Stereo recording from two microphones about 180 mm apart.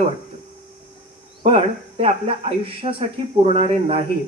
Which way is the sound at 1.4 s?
30° right (ahead or behind).